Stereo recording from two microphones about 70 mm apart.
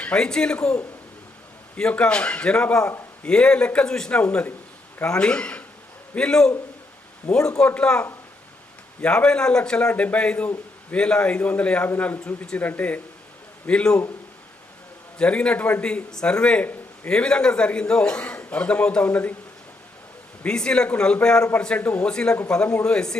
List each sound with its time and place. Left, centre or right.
0.0 s a man's voice: centre
12.2 s a man's voice: centre
12.5 s a man's voice: left
15.2 s a man's voice: centre
20.4 s a man's voice: centre